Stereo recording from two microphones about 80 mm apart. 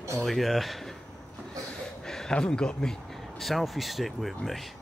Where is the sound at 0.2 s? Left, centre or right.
Centre.